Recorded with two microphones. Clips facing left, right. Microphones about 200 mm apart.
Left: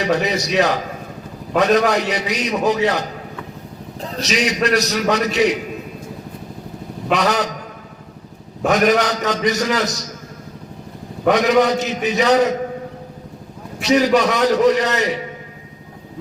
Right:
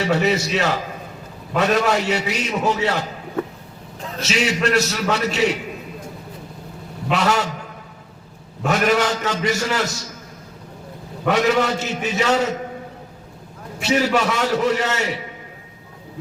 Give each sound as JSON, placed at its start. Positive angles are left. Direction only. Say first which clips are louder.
{"t": 0.0, "sound": "a man's voice", "louder": "even", "side_deg": 15}
{"t": 4.2, "sound": "a man's voice", "louder": "left 2 dB", "side_deg": 15}
{"t": 7.1, "sound": "a man's voice", "louder": "left 2 dB", "side_deg": 15}
{"t": 8.7, "sound": "a man's voice", "louder": "left 3 dB", "side_deg": 15}
{"t": 11.3, "sound": "a man's voice", "louder": "left 4 dB", "side_deg": 15}
{"t": 13.8, "sound": "a man's voice", "louder": "left 4 dB", "side_deg": 15}